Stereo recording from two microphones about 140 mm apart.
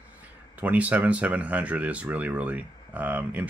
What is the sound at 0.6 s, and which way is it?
Speech, 10° right (ahead or behind).